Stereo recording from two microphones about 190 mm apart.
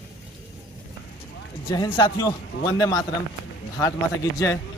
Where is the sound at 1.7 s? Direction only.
25° left (ahead or behind).